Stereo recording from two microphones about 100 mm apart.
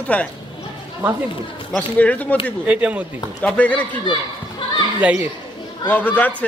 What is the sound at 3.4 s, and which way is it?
Speech, 10° left (ahead or behind).